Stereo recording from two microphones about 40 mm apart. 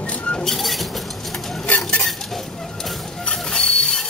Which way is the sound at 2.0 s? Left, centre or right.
Centre.